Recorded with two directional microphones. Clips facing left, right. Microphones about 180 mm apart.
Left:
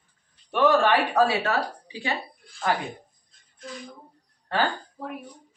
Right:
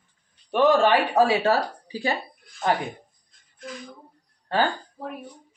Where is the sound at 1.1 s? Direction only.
30° right (ahead or behind).